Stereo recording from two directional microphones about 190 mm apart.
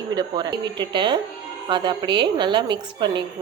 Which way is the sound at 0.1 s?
20° right (ahead or behind).